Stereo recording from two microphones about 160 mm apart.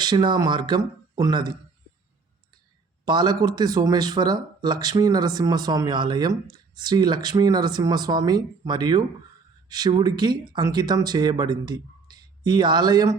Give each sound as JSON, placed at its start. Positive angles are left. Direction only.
{"t": 0.0, "sound": "speech", "side_deg": -25}
{"t": 3.1, "sound": "speech", "side_deg": -25}